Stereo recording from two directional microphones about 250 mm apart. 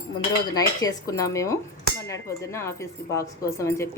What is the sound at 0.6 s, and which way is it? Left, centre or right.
Speech, centre.